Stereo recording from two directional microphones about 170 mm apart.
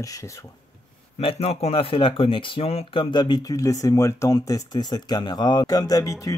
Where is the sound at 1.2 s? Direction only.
35° left (ahead or behind).